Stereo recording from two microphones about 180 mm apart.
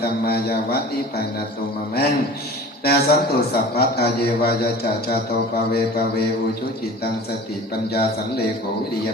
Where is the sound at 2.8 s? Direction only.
60° left (ahead or behind).